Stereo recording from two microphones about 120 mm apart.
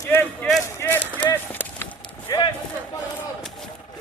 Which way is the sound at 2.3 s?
30° left (ahead or behind).